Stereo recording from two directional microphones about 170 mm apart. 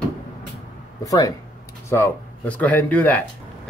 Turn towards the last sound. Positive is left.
turn(degrees=10)  # may be behind; listen again after turning